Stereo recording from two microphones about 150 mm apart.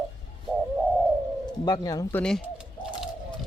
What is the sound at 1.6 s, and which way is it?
Speech, 25° left (ahead or behind).